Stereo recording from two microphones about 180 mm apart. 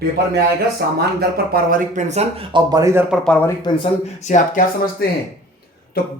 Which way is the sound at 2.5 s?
20° right (ahead or behind).